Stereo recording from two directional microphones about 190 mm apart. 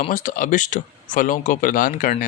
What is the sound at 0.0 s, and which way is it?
Speech, 40° left (ahead or behind).